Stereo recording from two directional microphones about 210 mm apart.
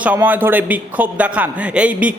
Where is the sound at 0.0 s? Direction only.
10° right (ahead or behind).